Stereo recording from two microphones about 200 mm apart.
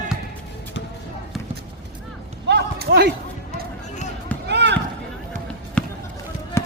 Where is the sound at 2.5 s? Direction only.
55° right (ahead or behind).